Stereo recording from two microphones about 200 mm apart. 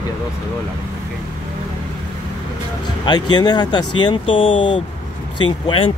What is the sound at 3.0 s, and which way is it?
Speech, 20° left (ahead or behind).